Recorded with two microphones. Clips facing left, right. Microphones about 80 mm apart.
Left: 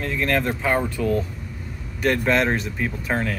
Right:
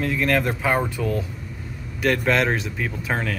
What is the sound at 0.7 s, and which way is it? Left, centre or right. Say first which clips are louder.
Speech: even; centre.